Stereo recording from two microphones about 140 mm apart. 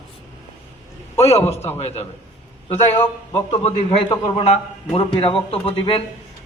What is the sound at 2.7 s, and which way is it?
Speech, 20° left (ahead or behind).